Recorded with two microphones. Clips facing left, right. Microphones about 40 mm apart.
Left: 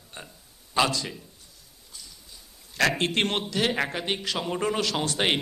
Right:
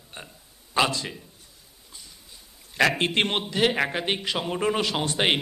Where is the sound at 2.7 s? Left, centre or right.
Centre.